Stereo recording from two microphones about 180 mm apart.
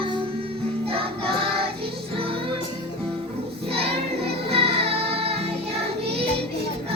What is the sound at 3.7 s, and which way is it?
Music, 35° right (ahead or behind).